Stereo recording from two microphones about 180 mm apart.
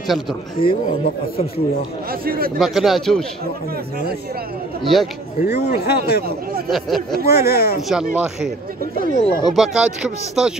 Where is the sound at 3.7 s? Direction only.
60° right (ahead or behind).